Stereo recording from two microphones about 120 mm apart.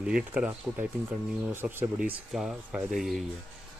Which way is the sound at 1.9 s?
5° right (ahead or behind).